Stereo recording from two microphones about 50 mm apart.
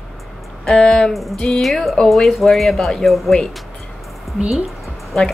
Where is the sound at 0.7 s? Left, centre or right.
Centre.